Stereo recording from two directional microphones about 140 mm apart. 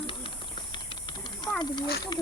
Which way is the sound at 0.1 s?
40° left (ahead or behind).